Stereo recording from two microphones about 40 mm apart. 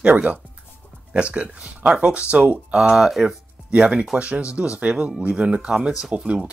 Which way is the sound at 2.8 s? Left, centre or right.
Centre.